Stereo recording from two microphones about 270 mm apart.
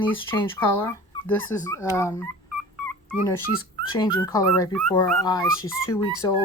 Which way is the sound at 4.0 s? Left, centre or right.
Centre.